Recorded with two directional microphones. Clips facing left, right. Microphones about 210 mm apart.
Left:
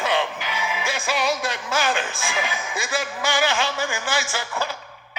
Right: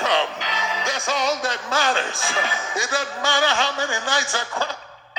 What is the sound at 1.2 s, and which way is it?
Speech, 20° right (ahead or behind).